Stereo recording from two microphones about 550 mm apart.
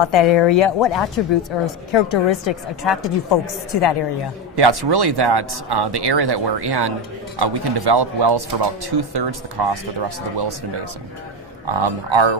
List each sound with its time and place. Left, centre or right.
0.0 s a woman's voice: left
4.6 s speech: right
11.6 s speech: right